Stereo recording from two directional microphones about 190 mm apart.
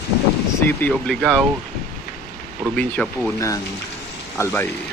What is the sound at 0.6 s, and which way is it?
Speech, 10° left (ahead or behind).